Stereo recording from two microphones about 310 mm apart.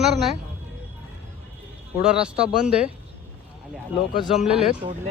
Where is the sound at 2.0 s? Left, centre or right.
Centre.